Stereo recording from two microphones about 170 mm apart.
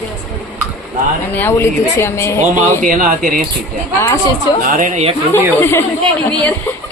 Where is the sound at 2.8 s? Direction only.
50° right (ahead or behind).